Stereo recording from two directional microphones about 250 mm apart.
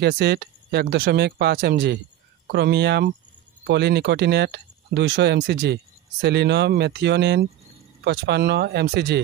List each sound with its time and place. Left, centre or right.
0.0 s speech: right